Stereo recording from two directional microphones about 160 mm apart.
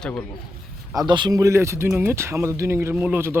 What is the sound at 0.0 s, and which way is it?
Speech, 10° left (ahead or behind).